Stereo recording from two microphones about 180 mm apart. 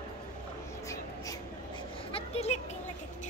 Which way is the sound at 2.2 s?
35° left (ahead or behind).